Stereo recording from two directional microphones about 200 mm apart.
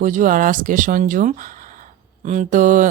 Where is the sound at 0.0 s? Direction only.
40° right (ahead or behind).